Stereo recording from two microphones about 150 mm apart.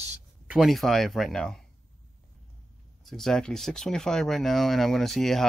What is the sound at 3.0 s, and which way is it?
Speech, centre (ahead or behind).